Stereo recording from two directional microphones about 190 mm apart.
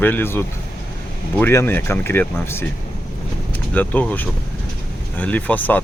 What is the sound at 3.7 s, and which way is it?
Speech, 10° left (ahead or behind).